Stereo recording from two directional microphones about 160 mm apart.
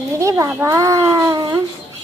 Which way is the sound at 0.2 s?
20° right (ahead or behind).